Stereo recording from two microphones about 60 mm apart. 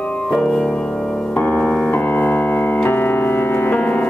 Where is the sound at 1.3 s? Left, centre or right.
Left.